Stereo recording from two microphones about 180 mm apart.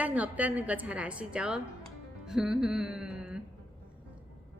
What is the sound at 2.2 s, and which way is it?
Music, 5° right (ahead or behind).